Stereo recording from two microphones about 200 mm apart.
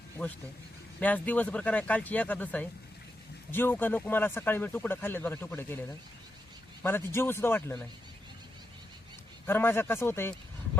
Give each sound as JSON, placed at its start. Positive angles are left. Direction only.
{"t": 0.2, "sound": "speech", "side_deg": 5}
{"t": 6.8, "sound": "speech", "side_deg": 10}
{"t": 9.5, "sound": "speech", "side_deg": 10}